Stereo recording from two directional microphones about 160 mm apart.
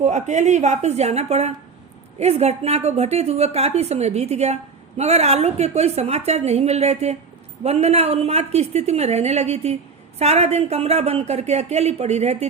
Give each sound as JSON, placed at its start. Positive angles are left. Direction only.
{"t": 0.0, "sound": "a woman's voice", "side_deg": -45}